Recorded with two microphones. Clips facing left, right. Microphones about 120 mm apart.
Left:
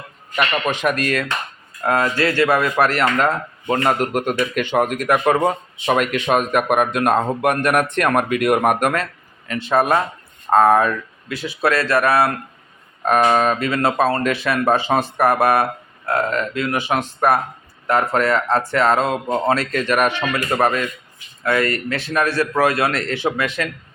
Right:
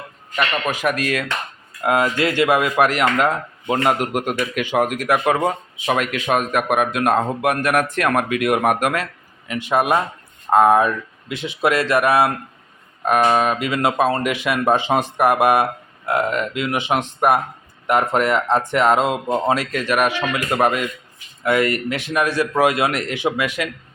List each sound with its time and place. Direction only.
0.3 s a man's voice: 5° left (ahead or behind)
0.7 s a man's voice: 5° right (ahead or behind)
13.0 s speech: 5° right (ahead or behind)